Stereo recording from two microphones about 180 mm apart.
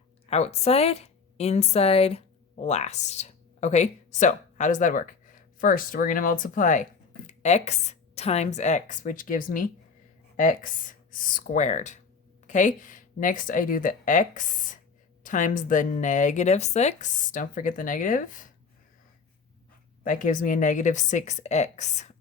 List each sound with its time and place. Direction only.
0.3 s a woman's voice: 35° left (ahead or behind)
20.1 s speech: 45° left (ahead or behind)